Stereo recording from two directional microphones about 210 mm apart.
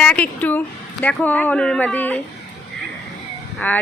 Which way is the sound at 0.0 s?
5° left (ahead or behind).